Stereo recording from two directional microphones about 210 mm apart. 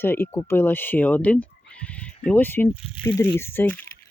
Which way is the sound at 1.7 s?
5° left (ahead or behind).